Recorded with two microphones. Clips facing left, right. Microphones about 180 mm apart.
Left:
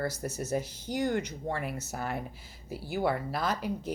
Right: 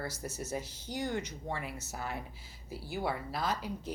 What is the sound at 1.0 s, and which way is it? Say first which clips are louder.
A woman's voice: left 6 dB; 45° left (ahead or behind).